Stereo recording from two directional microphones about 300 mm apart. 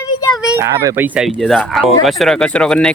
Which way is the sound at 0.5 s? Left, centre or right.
Centre.